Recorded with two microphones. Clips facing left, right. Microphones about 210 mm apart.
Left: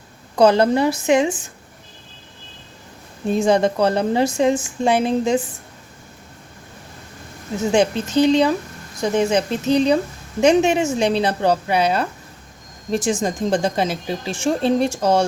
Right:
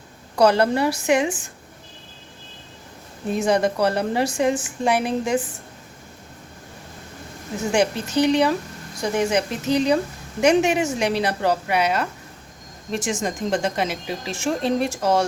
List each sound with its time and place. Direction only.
0.3 s a woman's voice: 25° left (ahead or behind)
3.2 s a woman's voice: 25° left (ahead or behind)
7.7 s a woman's voice: 25° left (ahead or behind)